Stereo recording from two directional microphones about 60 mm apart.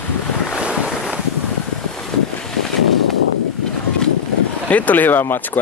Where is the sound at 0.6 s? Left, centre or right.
Centre.